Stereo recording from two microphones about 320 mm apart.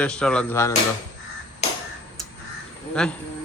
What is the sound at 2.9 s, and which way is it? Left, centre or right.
Speech, centre.